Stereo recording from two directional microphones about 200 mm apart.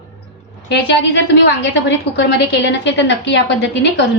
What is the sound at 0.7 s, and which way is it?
A woman's voice, 65° left (ahead or behind).